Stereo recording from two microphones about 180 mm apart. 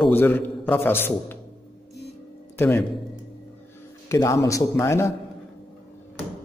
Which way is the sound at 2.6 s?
10° left (ahead or behind).